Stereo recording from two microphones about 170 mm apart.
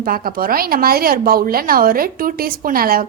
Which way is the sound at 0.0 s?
60° right (ahead or behind).